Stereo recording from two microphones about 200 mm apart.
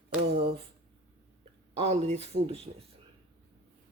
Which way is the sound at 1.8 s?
35° right (ahead or behind).